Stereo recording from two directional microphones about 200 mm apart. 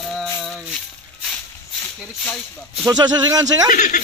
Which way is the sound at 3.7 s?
40° left (ahead or behind).